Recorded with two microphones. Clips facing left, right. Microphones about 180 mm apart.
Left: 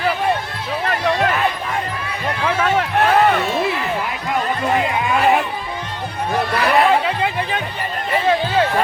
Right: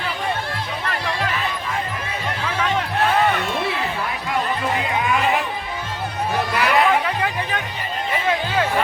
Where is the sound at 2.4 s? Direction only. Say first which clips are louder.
Left 5 dB; 50° left (ahead or behind).